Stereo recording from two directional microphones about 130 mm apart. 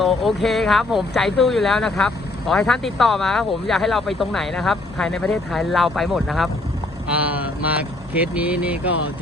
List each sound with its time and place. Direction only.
0.0 s speech: centre (ahead or behind)
7.1 s speech: 10° right (ahead or behind)